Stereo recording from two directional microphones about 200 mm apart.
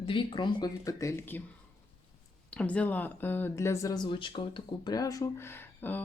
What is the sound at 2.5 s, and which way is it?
Speech, 5° left (ahead or behind).